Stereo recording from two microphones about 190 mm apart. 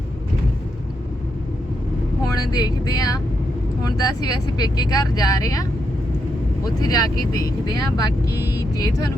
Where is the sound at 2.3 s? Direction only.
20° left (ahead or behind).